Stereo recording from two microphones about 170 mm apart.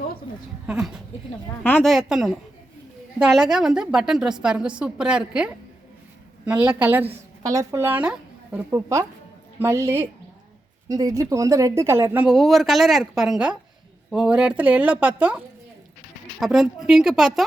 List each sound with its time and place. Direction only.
0.7 s a woman's voice: 5° right (ahead or behind)
1.6 s a woman's voice: 5° left (ahead or behind)
16.4 s a woman's voice: centre (ahead or behind)